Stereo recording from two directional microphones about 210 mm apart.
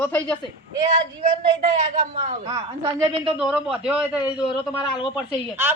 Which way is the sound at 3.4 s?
5° right (ahead or behind).